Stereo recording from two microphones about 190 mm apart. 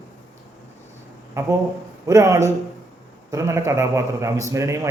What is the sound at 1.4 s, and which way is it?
A man's voice, 15° right (ahead or behind).